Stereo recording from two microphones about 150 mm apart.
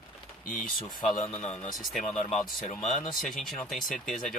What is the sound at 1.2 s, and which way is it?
A man's voice, 45° left (ahead or behind).